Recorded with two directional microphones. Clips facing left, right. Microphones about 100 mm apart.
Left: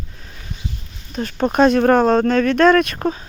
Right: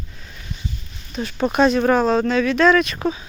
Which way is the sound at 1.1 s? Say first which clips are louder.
Left 2 dB; 45° left (ahead or behind).